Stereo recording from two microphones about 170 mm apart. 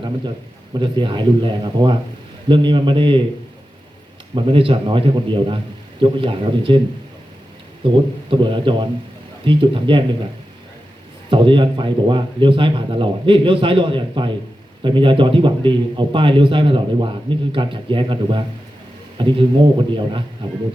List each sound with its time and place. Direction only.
0.7 s a man's voice: 30° right (ahead or behind)
4.4 s a man's voice: 30° right (ahead or behind)
7.9 s a man's voice: 30° right (ahead or behind)
11.3 s a man's voice: 30° right (ahead or behind)